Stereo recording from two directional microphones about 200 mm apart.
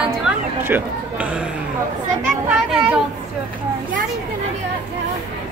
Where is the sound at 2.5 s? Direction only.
5° right (ahead or behind).